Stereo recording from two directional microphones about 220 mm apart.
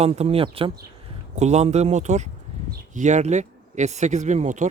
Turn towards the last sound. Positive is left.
turn(degrees=-35)  # may be behind; listen again after turning